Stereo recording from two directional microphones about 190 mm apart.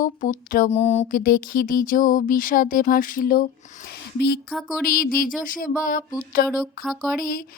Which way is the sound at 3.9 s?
60° left (ahead or behind).